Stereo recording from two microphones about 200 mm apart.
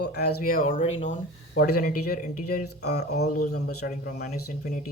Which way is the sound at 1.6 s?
50° left (ahead or behind).